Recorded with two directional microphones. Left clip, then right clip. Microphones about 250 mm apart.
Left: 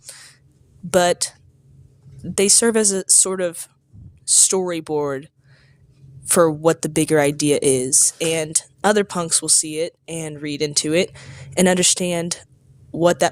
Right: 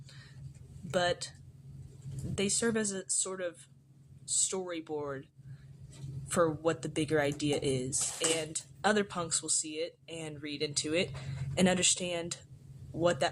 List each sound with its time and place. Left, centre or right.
0.0 s a sound: left
0.9 s a woman's voice: left
2.3 s speech: left